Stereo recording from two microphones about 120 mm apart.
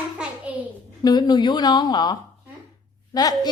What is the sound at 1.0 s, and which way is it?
A woman's voice, 35° left (ahead or behind).